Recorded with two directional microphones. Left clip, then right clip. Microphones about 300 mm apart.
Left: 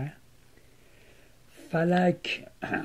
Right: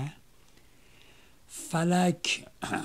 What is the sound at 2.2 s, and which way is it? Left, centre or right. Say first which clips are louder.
Speech: right 2 dB; right.